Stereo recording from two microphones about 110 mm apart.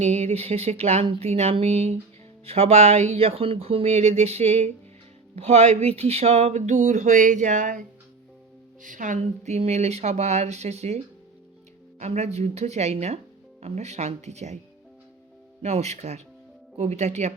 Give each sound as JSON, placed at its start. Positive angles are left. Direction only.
{"t": 0.0, "sound": "speech", "side_deg": -80}
{"t": 9.4, "sound": "a woman's voice", "side_deg": -85}
{"t": 15.6, "sound": "a woman's voice", "side_deg": -80}